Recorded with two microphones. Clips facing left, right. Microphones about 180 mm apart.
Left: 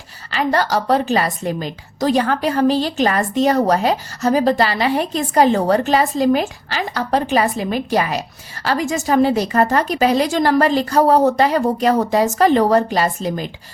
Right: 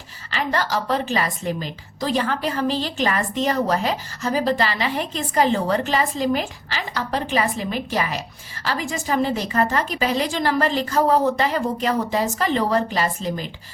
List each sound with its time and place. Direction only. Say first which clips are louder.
0.3 s a woman's voice: left 5 dB; 40° left (ahead or behind)